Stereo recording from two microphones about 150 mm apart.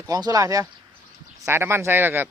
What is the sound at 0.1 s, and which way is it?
Speech, 25° right (ahead or behind).